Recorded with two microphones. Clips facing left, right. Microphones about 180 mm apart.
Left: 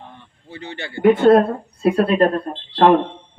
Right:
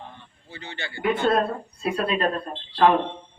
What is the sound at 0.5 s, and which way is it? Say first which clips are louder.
Speech: left 6 dB; 60° left (ahead or behind).